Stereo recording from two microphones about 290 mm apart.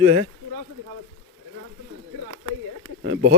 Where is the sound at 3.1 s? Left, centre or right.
Right.